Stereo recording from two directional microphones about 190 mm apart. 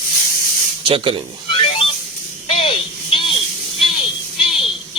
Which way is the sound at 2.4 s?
25° left (ahead or behind).